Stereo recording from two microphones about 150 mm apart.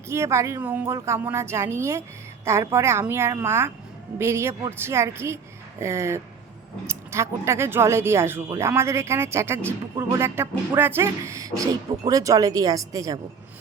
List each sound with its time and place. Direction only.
0.1 s a woman's voice: 20° right (ahead or behind)